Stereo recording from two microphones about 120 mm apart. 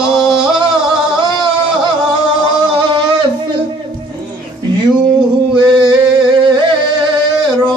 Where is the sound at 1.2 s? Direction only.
40° right (ahead or behind).